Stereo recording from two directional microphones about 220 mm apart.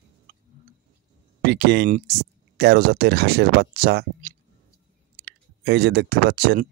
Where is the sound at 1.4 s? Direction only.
50° right (ahead or behind).